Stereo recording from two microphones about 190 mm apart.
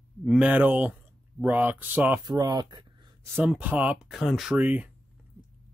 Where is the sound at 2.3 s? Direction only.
20° right (ahead or behind).